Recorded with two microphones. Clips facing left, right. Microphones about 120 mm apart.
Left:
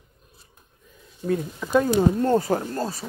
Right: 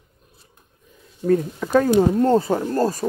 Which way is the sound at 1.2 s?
50° right (ahead or behind).